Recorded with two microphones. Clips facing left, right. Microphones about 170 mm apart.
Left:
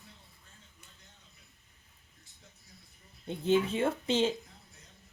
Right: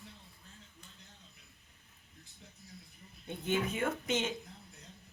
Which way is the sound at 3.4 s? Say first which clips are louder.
Left 6 dB; 30° left (ahead or behind).